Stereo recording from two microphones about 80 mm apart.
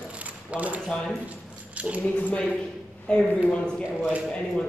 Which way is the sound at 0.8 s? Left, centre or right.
Centre.